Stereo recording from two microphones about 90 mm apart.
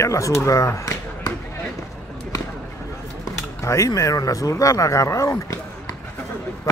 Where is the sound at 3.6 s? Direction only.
35° left (ahead or behind).